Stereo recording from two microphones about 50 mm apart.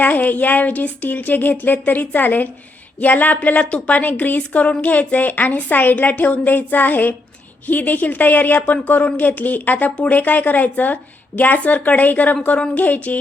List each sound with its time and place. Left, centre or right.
0.0 s a woman's voice: left